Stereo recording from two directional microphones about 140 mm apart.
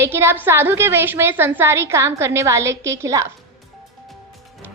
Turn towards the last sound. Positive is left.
turn(degrees=-20)  # may be behind; listen again after turning